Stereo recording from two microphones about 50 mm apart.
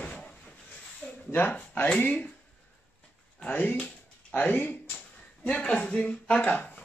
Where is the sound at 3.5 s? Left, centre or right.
Left.